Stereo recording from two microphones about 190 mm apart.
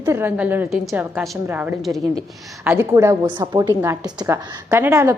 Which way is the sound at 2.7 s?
15° right (ahead or behind).